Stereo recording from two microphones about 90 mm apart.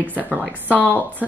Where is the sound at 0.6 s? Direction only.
15° left (ahead or behind).